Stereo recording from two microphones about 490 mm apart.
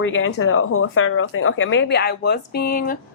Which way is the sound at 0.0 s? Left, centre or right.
Left.